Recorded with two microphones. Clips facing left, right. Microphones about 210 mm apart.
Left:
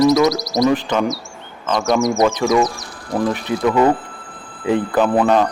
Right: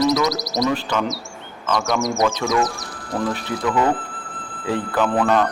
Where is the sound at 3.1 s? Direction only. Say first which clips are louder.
Left 4 dB; 15° left (ahead or behind).